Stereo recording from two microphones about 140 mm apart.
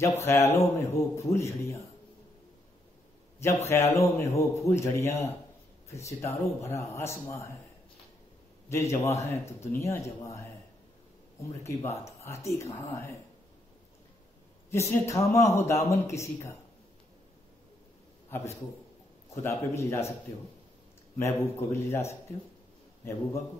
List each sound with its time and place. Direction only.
0.0 s a man's voice: 20° left (ahead or behind)
3.3 s a man's voice: 20° left (ahead or behind)
8.6 s a man's voice: 20° left (ahead or behind)
11.6 s a man's voice: 20° left (ahead or behind)
14.7 s a man's voice: 20° left (ahead or behind)
18.3 s a man's voice: 20° left (ahead or behind)
21.2 s a man's voice: 15° left (ahead or behind)